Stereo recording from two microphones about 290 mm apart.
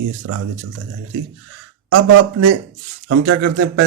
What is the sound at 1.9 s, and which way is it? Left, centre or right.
Speech, right.